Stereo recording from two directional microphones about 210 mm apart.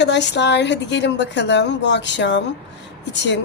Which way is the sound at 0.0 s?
55° left (ahead or behind).